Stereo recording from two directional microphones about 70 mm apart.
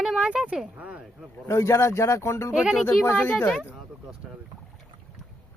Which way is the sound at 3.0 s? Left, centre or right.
Left.